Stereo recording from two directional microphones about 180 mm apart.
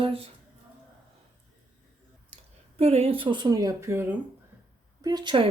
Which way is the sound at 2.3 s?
35° right (ahead or behind).